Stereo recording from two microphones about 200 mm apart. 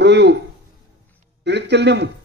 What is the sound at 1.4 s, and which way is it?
Speech, 60° right (ahead or behind).